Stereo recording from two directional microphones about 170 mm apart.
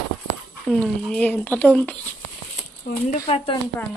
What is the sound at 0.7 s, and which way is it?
A woman's voice, 5° left (ahead or behind).